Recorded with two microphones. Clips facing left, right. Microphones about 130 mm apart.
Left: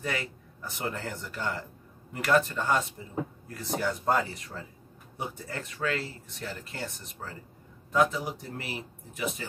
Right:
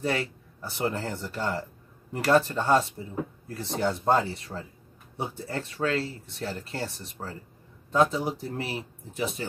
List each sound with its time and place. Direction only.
0.0 s speech: 30° right (ahead or behind)